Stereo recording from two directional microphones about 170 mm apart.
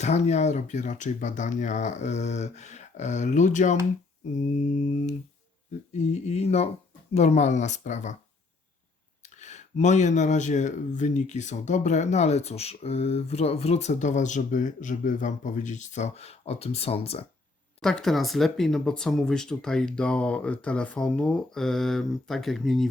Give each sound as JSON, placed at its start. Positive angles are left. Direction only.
{"t": 0.0, "sound": "speech", "side_deg": 40}
{"t": 9.2, "sound": "speech", "side_deg": 45}
{"t": 17.7, "sound": "speech", "side_deg": 5}